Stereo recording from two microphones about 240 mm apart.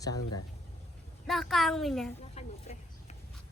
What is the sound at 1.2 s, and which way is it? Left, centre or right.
Speech, centre.